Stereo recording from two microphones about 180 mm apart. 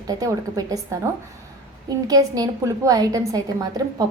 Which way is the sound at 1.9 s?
20° right (ahead or behind).